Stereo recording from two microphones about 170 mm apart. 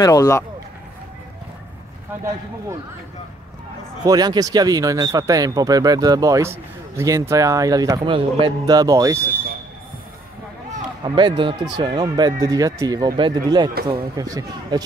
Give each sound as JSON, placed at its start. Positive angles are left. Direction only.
{"t": 0.0, "sound": "speech", "side_deg": 20}
{"t": 4.0, "sound": "speech", "side_deg": -20}
{"t": 11.1, "sound": "speech", "side_deg": -25}